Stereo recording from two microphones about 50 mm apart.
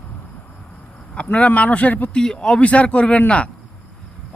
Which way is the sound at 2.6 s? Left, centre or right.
Left.